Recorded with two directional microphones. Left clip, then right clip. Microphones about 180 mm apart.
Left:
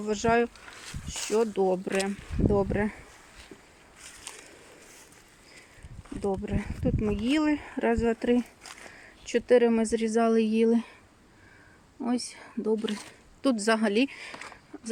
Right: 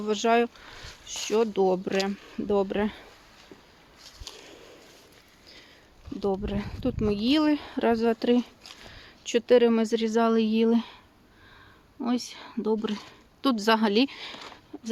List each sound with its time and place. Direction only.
0.0 s speech: 10° right (ahead or behind)
6.1 s speech: 10° right (ahead or behind)
11.9 s a woman's voice: centre (ahead or behind)